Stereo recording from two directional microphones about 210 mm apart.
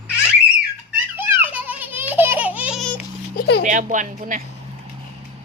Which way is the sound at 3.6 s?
35° right (ahead or behind).